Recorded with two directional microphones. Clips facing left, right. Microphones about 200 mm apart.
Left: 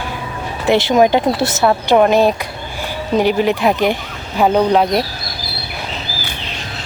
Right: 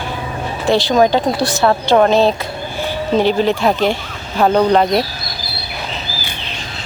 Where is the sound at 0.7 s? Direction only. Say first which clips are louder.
Left 1 dB; 20° left (ahead or behind).